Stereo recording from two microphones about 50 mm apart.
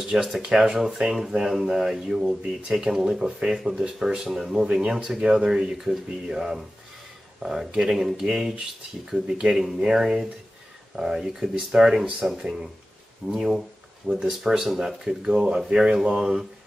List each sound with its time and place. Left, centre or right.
0.0 s speech: centre
7.9 s speech: centre